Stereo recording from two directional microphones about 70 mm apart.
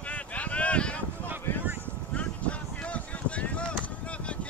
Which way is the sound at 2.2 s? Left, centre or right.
Centre.